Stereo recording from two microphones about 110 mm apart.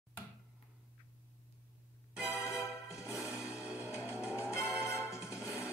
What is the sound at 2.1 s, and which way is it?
Music, 15° right (ahead or behind).